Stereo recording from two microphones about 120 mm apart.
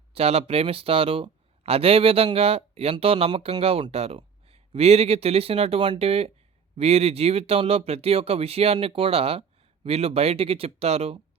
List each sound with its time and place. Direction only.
0.1 s speech: 60° right (ahead or behind)